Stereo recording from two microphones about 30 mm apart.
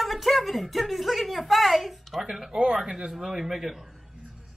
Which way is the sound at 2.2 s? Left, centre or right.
Centre.